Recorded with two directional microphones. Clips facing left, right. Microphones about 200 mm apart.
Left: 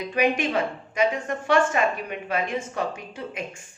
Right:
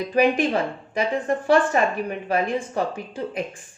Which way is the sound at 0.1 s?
35° right (ahead or behind).